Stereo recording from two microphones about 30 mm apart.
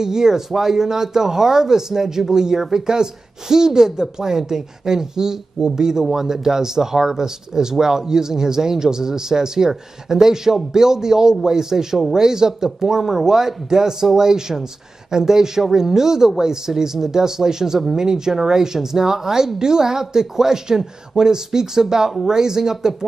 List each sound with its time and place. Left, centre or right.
0.0 s speech: centre